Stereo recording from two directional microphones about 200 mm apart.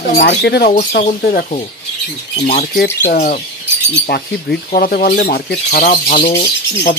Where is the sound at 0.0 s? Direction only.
55° left (ahead or behind).